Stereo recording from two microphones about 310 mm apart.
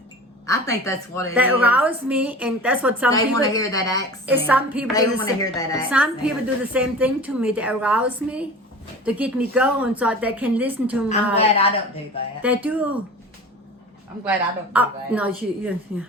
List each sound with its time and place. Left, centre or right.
0.4 s a woman's voice: centre
1.3 s a woman's voice: centre
3.1 s a woman's voice: centre
4.4 s a woman's voice: centre
4.9 s a woman's voice: centre
5.9 s a woman's voice: centre
11.3 s speech: centre
12.4 s a woman's voice: centre
14.3 s a woman's voice: centre